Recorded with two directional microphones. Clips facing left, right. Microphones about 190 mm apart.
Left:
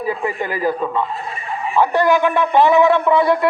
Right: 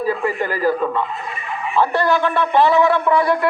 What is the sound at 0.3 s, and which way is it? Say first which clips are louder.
A man's voice: even; 15° left (ahead or behind).